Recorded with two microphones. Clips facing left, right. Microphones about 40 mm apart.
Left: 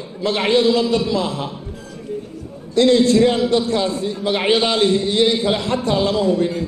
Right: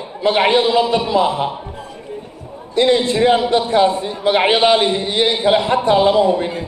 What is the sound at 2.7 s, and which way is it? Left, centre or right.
A man's voice, right.